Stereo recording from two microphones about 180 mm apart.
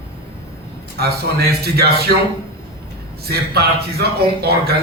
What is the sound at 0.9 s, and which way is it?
A man's voice, 60° right (ahead or behind).